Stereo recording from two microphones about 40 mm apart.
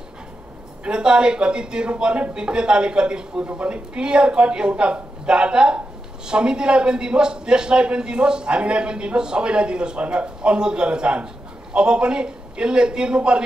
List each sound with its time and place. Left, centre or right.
0.8 s a man's voice: right